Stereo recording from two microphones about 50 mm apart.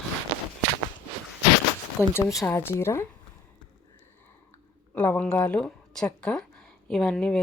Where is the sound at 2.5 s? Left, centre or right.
Left.